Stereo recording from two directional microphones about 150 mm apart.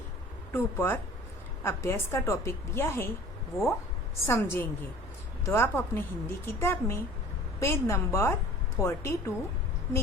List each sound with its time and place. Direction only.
0.5 s a woman's voice: 15° left (ahead or behind)